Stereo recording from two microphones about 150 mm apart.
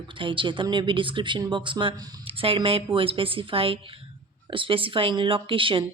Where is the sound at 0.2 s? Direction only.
35° right (ahead or behind).